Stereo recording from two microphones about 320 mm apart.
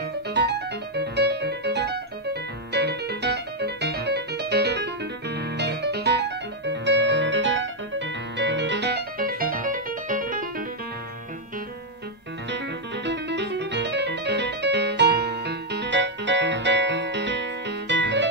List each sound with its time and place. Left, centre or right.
0.3 s music: right
12.4 s music: right